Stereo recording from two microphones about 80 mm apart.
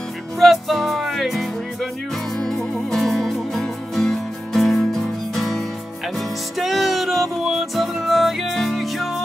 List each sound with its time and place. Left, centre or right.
0.4 s music: centre